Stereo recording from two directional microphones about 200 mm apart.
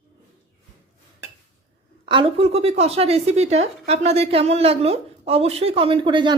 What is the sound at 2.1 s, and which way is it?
Speech, 25° right (ahead or behind).